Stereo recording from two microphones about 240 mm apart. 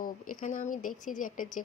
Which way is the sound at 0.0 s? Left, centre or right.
Left.